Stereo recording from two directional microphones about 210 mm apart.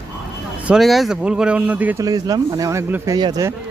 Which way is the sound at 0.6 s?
Centre (ahead or behind).